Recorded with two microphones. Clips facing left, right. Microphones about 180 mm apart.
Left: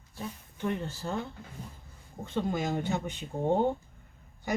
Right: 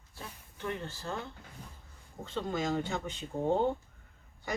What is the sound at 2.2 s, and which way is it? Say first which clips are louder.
Speech: left 3 dB; 15° left (ahead or behind).